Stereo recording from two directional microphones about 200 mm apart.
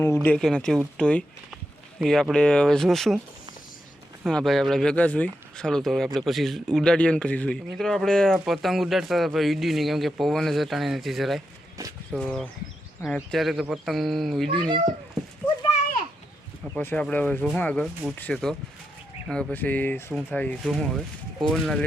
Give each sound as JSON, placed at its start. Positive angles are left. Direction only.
{"t": 0.0, "sound": "speech", "side_deg": 10}
{"t": 4.2, "sound": "speech", "side_deg": 0}
{"t": 11.8, "sound": "speech", "side_deg": -15}
{"t": 12.1, "sound": "speech", "side_deg": 0}
{"t": 16.7, "sound": "speech", "side_deg": 5}